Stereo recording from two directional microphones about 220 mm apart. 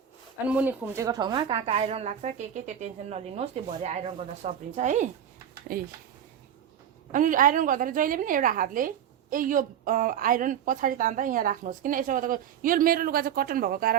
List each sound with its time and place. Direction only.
0.4 s a woman's voice: 5° right (ahead or behind); by 5.8 s 40° right (ahead or behind)
7.1 s a woman's voice: 35° right (ahead or behind)